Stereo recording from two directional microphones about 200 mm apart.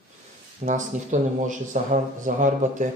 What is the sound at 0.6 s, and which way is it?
Speech, 40° right (ahead or behind).